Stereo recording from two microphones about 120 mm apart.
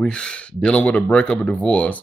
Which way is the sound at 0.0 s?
10° left (ahead or behind).